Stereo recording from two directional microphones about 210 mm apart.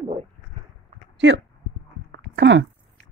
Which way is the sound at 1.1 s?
60° right (ahead or behind).